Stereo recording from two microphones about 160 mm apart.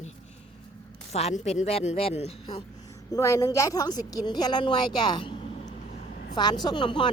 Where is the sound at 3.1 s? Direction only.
20° left (ahead or behind).